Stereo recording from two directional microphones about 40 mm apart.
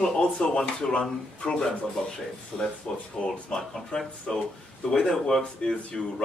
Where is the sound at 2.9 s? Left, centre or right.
Centre.